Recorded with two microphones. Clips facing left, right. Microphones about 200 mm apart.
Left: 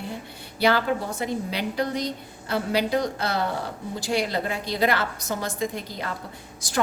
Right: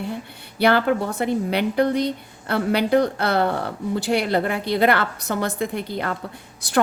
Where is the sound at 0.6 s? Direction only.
60° right (ahead or behind).